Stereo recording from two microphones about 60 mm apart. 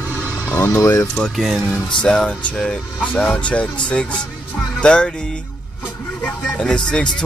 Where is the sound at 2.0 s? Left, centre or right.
Centre.